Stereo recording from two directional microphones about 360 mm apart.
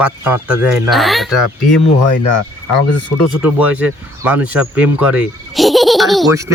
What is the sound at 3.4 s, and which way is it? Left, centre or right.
A man's voice, centre.